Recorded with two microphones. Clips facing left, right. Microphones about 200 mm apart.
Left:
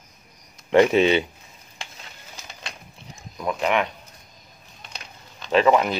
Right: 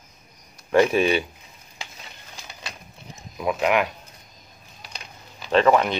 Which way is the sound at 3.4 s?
5° right (ahead or behind).